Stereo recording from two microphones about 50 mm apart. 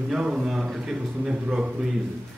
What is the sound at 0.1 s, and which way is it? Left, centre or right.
Speech, centre.